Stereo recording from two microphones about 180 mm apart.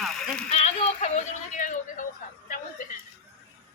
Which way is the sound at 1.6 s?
45° left (ahead or behind).